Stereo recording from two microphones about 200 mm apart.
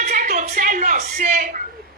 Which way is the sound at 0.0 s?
40° right (ahead or behind).